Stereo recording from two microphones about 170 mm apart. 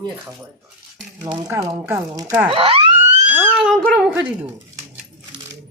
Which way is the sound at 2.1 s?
20° right (ahead or behind).